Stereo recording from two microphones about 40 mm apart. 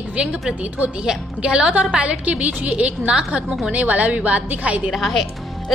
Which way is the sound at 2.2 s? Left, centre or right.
Right.